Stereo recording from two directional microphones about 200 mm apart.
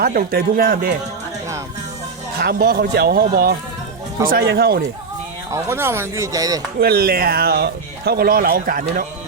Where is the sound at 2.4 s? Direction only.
50° right (ahead or behind).